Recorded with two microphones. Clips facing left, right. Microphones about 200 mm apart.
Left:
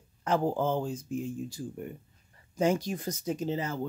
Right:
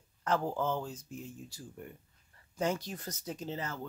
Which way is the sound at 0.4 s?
20° left (ahead or behind).